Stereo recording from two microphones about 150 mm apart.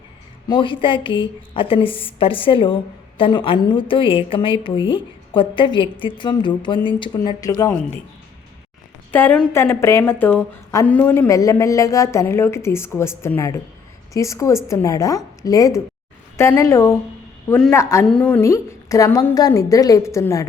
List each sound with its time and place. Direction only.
0.4 s a woman's voice: 30° left (ahead or behind)
9.1 s a woman's voice: 10° left (ahead or behind)